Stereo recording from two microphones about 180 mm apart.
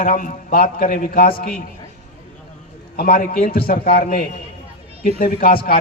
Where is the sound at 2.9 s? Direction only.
55° left (ahead or behind).